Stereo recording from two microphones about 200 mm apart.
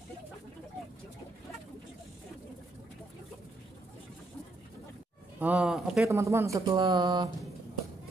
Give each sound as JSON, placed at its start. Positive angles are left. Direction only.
{"t": 5.4, "sound": "speech", "side_deg": -5}
{"t": 6.0, "sound": "speech", "side_deg": -15}